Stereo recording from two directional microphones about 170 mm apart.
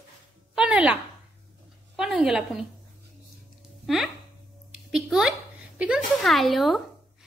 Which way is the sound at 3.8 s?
Centre (ahead or behind).